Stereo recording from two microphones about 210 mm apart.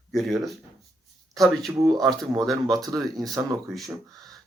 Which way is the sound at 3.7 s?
Centre (ahead or behind).